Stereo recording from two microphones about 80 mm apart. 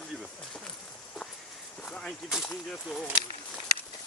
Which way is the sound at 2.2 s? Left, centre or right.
Centre.